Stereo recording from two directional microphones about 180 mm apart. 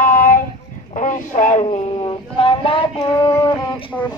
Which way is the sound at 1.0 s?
45° left (ahead or behind).